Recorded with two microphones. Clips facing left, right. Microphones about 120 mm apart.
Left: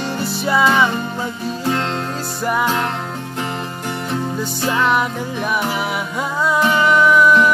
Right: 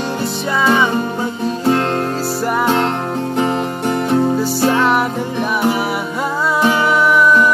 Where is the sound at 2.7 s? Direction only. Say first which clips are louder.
Right 5 dB; 25° right (ahead or behind).